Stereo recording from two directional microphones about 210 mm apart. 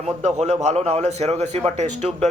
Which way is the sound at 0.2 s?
30° right (ahead or behind).